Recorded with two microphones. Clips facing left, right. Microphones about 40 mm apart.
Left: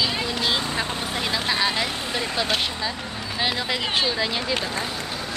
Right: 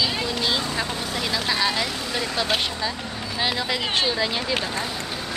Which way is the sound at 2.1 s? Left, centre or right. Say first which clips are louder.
Right 1 dB; centre.